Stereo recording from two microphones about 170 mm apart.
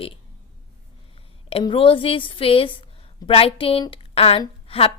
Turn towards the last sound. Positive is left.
turn(degrees=35)  # may be behind; listen again after turning